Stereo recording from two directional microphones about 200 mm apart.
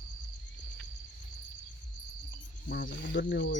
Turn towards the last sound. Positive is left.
turn(degrees=60)  # may be behind; listen again after turning